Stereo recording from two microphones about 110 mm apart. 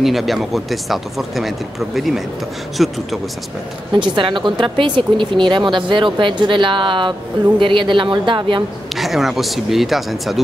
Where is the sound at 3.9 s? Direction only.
45° right (ahead or behind).